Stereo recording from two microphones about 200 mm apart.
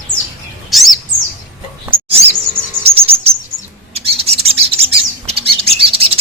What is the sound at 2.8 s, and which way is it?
Chirp, 30° right (ahead or behind).